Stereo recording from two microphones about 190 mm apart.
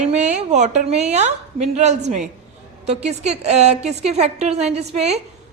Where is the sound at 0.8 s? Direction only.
35° right (ahead or behind).